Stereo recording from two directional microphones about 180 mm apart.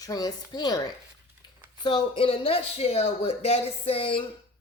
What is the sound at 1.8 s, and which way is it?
Speech, 25° left (ahead or behind).